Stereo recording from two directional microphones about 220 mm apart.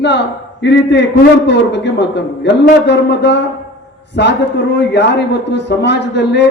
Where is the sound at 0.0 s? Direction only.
50° left (ahead or behind).